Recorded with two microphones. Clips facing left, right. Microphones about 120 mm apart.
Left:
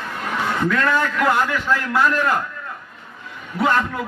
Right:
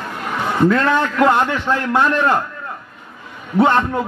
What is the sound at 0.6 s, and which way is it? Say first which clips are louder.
A man's voice: right 5 dB; 25° right (ahead or behind).